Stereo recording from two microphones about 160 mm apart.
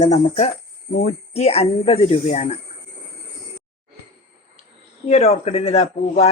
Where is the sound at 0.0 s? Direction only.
45° left (ahead or behind).